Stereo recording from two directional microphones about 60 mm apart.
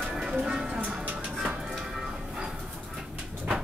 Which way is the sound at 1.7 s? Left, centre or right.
Centre.